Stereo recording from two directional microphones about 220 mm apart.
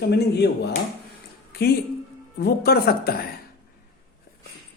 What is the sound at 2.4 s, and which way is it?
Speech, 45° left (ahead or behind).